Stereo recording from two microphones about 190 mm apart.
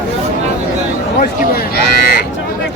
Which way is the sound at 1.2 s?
50° left (ahead or behind).